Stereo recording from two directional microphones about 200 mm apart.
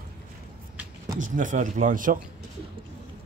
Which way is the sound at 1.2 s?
40° right (ahead or behind).